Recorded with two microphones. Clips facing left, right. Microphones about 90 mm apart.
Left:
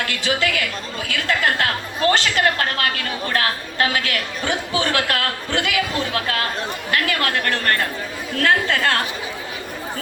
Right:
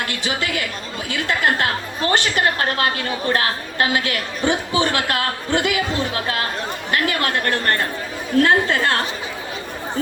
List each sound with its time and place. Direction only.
0.0 s a woman's voice: 30° right (ahead or behind)